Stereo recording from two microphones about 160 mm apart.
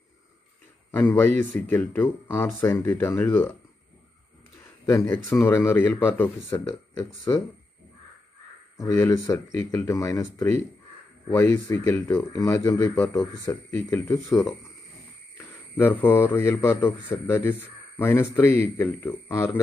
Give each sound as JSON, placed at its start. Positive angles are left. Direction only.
{"t": 0.9, "sound": "a man's voice", "side_deg": 15}
{"t": 4.8, "sound": "a man's voice", "side_deg": 15}
{"t": 8.7, "sound": "speech", "side_deg": 20}
{"t": 15.3, "sound": "a man's voice", "side_deg": 15}